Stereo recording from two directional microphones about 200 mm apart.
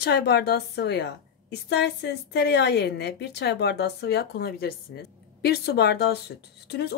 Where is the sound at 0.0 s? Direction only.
55° left (ahead or behind).